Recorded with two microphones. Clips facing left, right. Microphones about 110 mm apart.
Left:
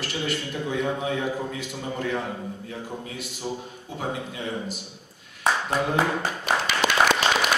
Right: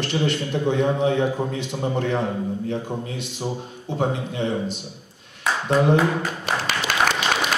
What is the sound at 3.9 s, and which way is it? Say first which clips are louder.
Mantra: right 7 dB; 25° right (ahead or behind).